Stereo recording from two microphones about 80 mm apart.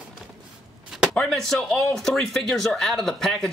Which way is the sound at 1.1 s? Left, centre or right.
Centre.